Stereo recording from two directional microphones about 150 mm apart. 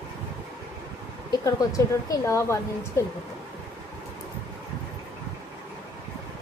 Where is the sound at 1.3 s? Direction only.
25° left (ahead or behind).